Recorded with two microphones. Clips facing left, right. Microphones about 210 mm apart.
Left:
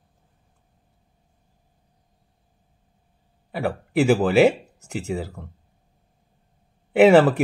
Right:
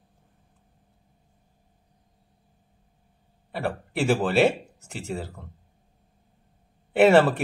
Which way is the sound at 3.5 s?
5° left (ahead or behind).